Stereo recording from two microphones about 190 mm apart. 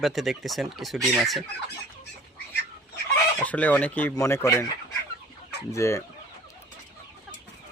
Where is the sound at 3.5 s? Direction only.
10° left (ahead or behind).